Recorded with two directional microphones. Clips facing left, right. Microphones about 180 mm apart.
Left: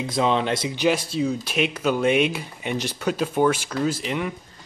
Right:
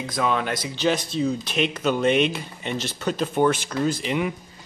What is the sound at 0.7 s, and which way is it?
Speech, 5° left (ahead or behind).